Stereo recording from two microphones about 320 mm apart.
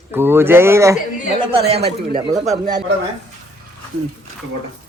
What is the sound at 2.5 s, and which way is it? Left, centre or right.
Speech, centre.